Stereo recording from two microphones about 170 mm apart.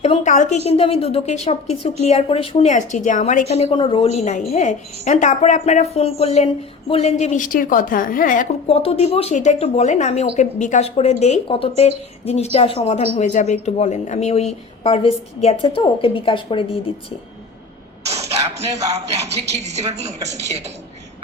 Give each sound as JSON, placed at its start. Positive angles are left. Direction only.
{"t": 0.0, "sound": "speech", "side_deg": 40}
{"t": 3.5, "sound": "a woman's voice", "side_deg": 35}
{"t": 8.6, "sound": "speech", "side_deg": 35}
{"t": 19.3, "sound": "a woman's voice", "side_deg": -40}